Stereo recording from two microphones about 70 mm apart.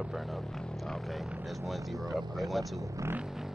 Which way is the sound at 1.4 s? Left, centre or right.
Centre.